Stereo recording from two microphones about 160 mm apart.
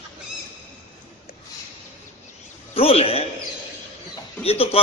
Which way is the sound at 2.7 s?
35° left (ahead or behind).